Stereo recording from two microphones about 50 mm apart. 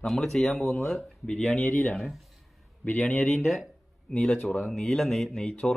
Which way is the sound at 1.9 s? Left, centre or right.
Centre.